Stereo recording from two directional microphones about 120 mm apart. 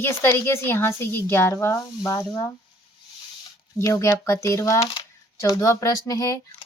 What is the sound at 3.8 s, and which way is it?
Speech, 25° left (ahead or behind).